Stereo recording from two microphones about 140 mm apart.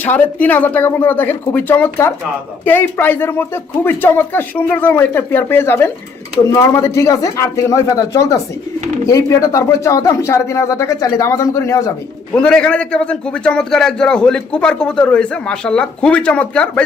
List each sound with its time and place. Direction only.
0.0 s a man's voice: 10° left (ahead or behind)
12.3 s a man's voice: 5° left (ahead or behind)